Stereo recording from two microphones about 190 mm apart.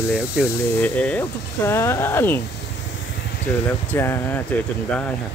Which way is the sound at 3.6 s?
10° left (ahead or behind).